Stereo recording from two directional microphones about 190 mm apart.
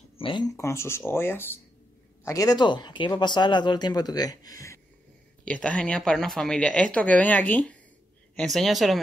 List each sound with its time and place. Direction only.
0.2 s a sound: 25° left (ahead or behind)
0.6 s speech: 15° left (ahead or behind)
5.4 s speech: 5° left (ahead or behind)